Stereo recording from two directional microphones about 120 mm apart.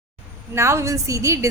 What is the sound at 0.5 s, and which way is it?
Speech, 25° right (ahead or behind).